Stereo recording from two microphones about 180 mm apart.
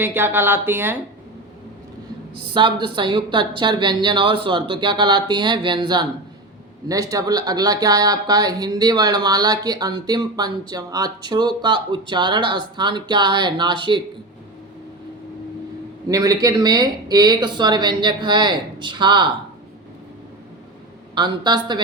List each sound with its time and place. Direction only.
0.0 s speech: 10° right (ahead or behind)
2.5 s speech: 25° right (ahead or behind)
16.0 s speech: 20° right (ahead or behind)
21.2 s speech: 25° right (ahead or behind)